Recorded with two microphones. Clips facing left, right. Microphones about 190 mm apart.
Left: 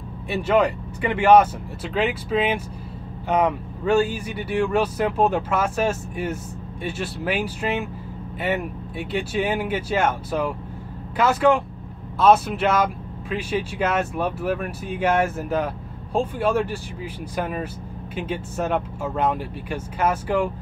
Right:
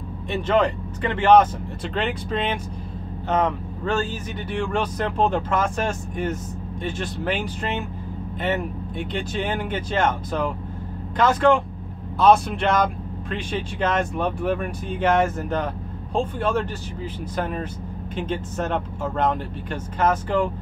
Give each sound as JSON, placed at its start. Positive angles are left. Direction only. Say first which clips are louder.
{"t": 0.3, "sound": "speech", "louder": "left 1 dB", "side_deg": 10}